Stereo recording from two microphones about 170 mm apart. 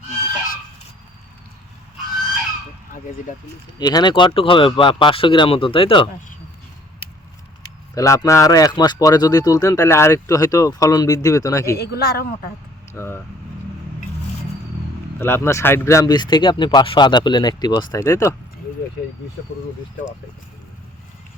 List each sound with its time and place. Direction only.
3.8 s speech: 25° left (ahead or behind)
7.9 s speech: 20° left (ahead or behind)
11.8 s speech: 70° left (ahead or behind)
12.9 s speech: 15° left (ahead or behind)
15.2 s speech: 15° left (ahead or behind)